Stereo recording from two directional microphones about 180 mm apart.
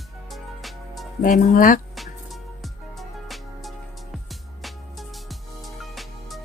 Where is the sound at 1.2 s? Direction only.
50° left (ahead or behind).